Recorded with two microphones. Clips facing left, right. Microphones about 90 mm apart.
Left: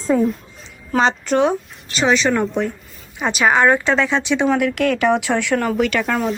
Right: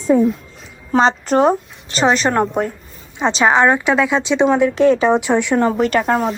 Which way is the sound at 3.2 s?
25° right (ahead or behind).